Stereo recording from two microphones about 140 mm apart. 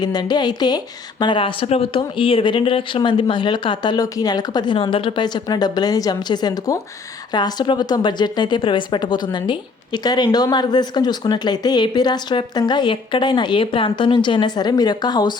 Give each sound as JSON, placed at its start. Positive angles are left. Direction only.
{"t": 0.0, "sound": "speech", "side_deg": 30}